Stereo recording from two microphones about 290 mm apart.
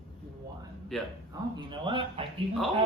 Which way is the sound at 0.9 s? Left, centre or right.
Centre.